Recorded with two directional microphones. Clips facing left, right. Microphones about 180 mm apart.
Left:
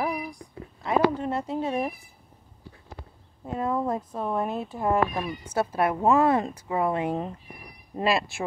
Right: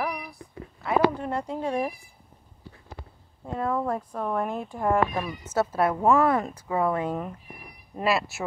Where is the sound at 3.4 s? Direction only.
15° left (ahead or behind).